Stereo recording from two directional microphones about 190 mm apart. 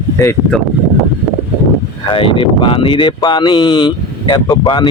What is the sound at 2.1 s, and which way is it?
Speech, 25° left (ahead or behind).